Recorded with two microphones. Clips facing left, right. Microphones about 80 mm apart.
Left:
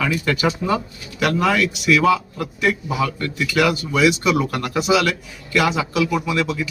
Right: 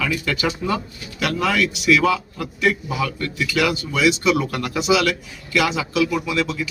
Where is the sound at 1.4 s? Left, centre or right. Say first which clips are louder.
Right 2 dB; left.